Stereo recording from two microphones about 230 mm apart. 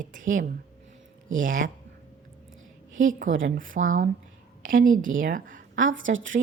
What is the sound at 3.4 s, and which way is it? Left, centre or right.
A woman's voice, right.